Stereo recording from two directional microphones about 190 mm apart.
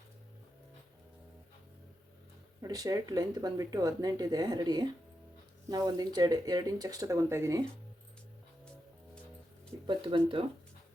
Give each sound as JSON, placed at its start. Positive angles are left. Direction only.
{"t": 2.6, "sound": "speech", "side_deg": -20}
{"t": 9.8, "sound": "speech", "side_deg": -25}